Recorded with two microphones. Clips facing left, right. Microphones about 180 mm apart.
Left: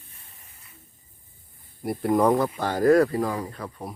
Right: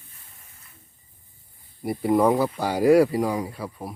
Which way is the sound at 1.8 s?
Centre (ahead or behind).